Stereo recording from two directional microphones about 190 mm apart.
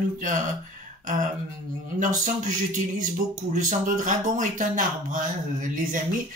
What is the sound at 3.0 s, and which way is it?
Speech, 40° right (ahead or behind).